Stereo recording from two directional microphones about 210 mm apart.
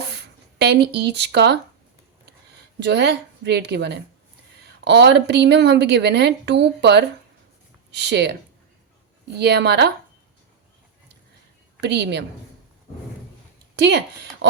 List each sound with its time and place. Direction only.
0.0 s a sound: 50° right (ahead or behind)
2.8 s a woman's voice: 55° right (ahead or behind)
11.8 s a woman's voice: 55° right (ahead or behind)
13.7 s speech: 55° right (ahead or behind)